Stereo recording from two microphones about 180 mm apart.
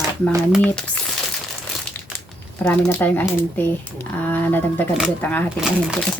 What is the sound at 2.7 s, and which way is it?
A woman's voice, 10° left (ahead or behind).